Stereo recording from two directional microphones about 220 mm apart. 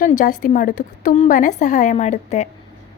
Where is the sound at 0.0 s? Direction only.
35° left (ahead or behind).